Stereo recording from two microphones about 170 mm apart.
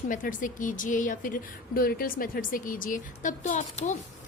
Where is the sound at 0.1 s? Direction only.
50° left (ahead or behind).